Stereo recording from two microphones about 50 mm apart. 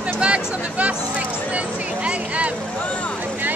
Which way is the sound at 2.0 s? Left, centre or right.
Right.